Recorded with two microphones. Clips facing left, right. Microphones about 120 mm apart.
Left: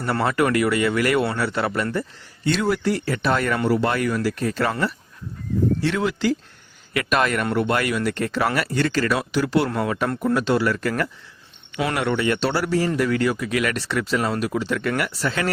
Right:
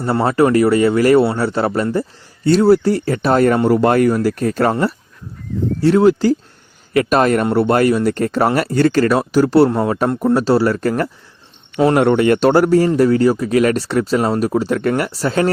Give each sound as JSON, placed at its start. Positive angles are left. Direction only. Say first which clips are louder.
{"t": 0.0, "sound": "speech", "louder": "right 6 dB", "side_deg": -30}
{"t": 9.6, "sound": "a man's voice", "louder": "right 7 dB", "side_deg": -30}
{"t": 12.9, "sound": "speech", "louder": "right 8 dB", "side_deg": -35}